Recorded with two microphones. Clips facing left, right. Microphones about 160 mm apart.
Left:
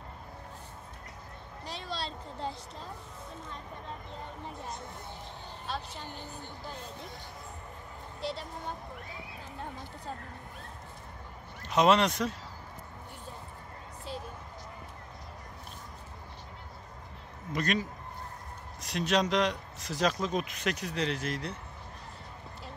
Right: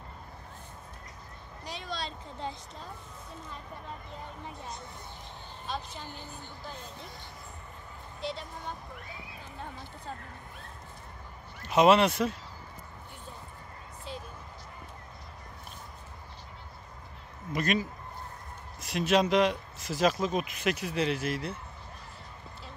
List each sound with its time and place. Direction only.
1.7 s speech: 30° left (ahead or behind)
8.2 s speech: 35° left (ahead or behind)
11.6 s speech: 5° right (ahead or behind)
17.5 s speech: 5° right (ahead or behind)